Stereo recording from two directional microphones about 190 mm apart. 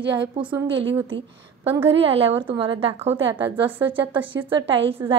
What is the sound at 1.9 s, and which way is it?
Speech, 30° right (ahead or behind).